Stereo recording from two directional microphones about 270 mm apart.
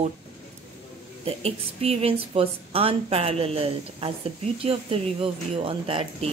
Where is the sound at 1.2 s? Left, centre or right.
Right.